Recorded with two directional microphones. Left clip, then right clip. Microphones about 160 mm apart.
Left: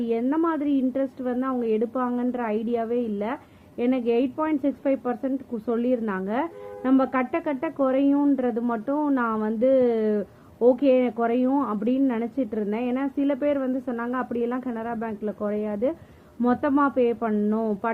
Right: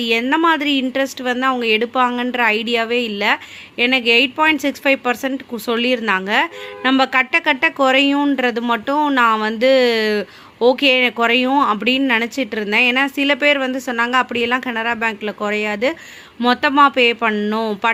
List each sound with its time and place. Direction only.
0.0 s a woman's voice: 20° right (ahead or behind)
11.4 s speech: 40° right (ahead or behind)
11.7 s a woman's voice: 20° right (ahead or behind)
16.4 s a woman's voice: 15° right (ahead or behind)
17.5 s speech: 40° right (ahead or behind)